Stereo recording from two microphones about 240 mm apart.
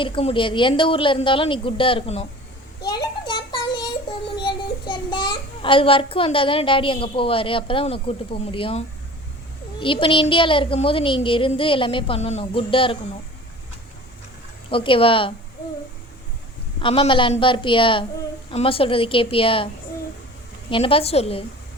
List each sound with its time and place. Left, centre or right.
0.0 s a child's voice: left
3.2 s a sound: centre
4.4 s a child's voice: centre
9.8 s a child's voice: left
14.7 s a child's voice: left
16.8 s a child's voice: left
20.7 s a child's voice: left